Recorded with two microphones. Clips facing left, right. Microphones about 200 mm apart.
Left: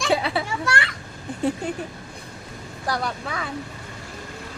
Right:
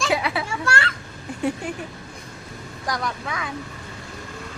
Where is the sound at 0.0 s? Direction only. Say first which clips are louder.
Left 1 dB; 30° left (ahead or behind).